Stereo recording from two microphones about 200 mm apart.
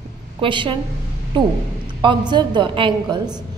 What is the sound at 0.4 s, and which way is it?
A woman's voice, 25° right (ahead or behind).